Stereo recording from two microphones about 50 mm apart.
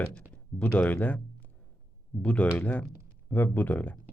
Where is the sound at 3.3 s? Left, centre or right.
Left.